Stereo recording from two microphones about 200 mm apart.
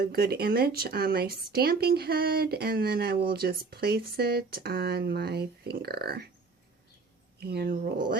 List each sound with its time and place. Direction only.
0.0 s a woman's voice: 50° right (ahead or behind)
7.3 s a woman's voice: 50° right (ahead or behind)